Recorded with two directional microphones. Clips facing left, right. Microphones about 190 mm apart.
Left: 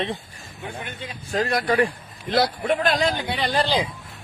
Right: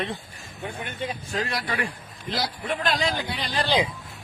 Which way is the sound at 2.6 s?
50° left (ahead or behind).